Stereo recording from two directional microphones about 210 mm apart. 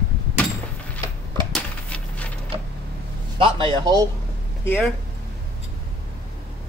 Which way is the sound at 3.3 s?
25° right (ahead or behind).